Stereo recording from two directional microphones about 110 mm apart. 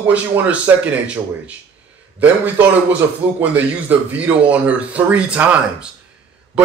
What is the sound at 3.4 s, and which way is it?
Speech, 15° right (ahead or behind).